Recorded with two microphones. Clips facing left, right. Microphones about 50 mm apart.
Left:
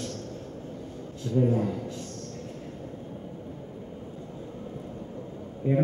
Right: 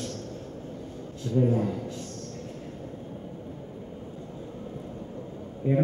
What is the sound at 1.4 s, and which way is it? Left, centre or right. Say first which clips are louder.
Speech: even; centre.